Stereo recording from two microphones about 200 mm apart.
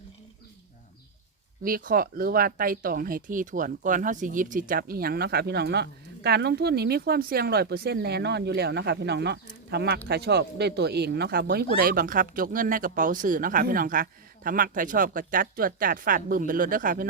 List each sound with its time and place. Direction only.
1.6 s speech: 45° right (ahead or behind)